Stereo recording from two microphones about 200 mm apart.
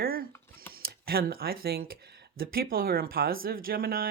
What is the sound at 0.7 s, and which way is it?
Speech, 50° right (ahead or behind).